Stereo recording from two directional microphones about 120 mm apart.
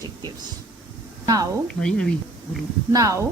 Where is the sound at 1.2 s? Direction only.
30° right (ahead or behind).